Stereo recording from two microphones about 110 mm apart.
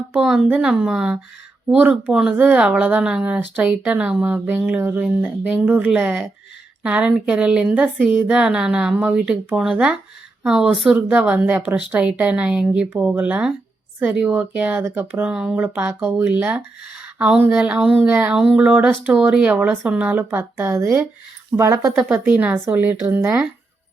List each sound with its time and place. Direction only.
0.1 s speech: 10° right (ahead or behind)
15.3 s speech: 5° right (ahead or behind)
21.5 s speech: 30° right (ahead or behind)
22.1 s speech: 20° right (ahead or behind)